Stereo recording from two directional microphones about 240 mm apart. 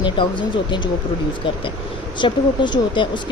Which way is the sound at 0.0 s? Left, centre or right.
Centre.